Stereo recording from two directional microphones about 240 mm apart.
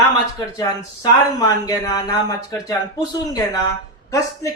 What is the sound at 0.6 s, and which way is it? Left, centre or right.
A man's voice, centre.